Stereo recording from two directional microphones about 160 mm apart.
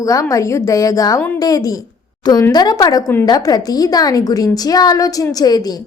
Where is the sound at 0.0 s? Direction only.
20° left (ahead or behind).